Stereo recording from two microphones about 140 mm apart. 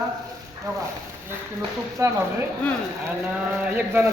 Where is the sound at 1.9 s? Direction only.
20° right (ahead or behind).